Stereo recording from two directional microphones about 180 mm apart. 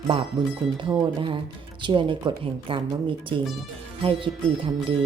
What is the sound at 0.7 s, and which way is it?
Speech, 25° right (ahead or behind).